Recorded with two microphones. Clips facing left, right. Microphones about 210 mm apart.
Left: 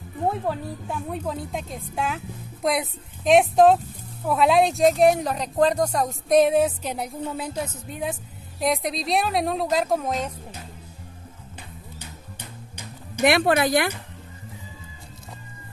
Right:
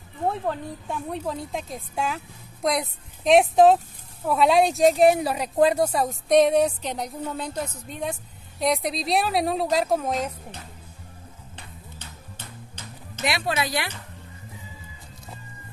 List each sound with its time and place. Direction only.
0.5 s speech: 5° left (ahead or behind)
12.0 s music: 10° left (ahead or behind)
13.2 s speech: 55° left (ahead or behind)